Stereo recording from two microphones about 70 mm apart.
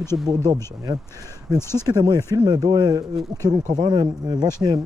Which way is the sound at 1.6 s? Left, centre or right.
Left.